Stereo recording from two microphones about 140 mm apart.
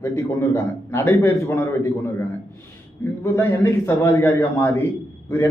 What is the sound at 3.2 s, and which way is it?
A man's voice, 20° left (ahead or behind).